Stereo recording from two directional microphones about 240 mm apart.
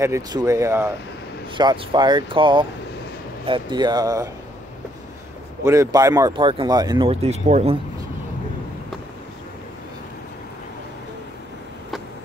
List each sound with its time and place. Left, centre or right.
0.0 s speech: centre
5.6 s speech: centre